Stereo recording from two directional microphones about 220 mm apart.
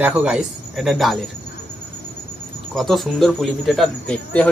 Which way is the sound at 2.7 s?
Centre (ahead or behind).